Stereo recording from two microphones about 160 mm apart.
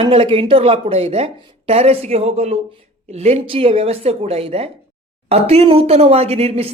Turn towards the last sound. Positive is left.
turn(degrees=-40)  # may be behind; listen again after turning